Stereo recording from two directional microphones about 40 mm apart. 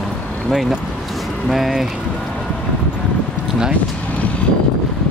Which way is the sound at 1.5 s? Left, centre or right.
Centre.